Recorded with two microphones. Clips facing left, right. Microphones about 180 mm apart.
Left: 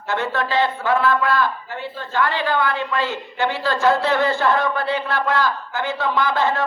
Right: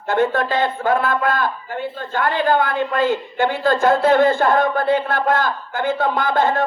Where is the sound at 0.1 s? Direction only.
50° right (ahead or behind).